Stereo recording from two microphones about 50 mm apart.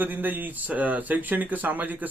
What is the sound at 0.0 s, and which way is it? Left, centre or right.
Speech, right.